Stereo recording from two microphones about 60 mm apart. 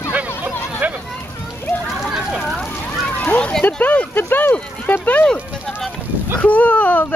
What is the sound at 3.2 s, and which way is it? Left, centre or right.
Speech, left.